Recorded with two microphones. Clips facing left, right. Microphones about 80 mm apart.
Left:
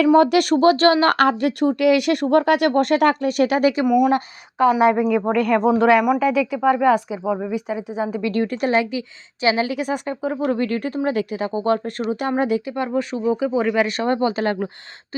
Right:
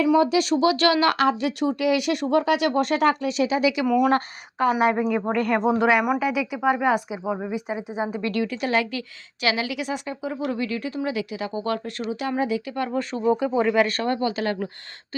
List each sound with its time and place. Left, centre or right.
0.1 s speech: left
1.1 s speech: left
3.8 s speech: centre
4.8 s speech: centre
5.5 s speech: centre
8.3 s speech: left
8.8 s speech: centre
9.4 s speech: left
12.4 s speech: left
12.9 s speech: centre
14.1 s speech: left